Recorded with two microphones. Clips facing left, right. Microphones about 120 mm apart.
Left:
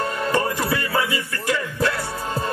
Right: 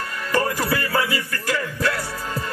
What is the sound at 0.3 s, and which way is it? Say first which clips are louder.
Music: right 2 dB; 25° left (ahead or behind).